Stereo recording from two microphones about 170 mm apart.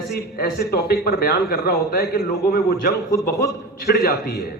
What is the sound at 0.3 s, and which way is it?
A man's voice, 65° left (ahead or behind).